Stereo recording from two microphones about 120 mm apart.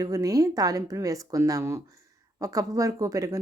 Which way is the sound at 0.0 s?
30° right (ahead or behind).